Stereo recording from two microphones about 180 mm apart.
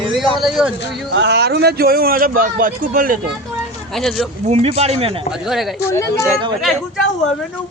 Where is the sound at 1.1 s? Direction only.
70° right (ahead or behind); by 3.2 s 50° right (ahead or behind).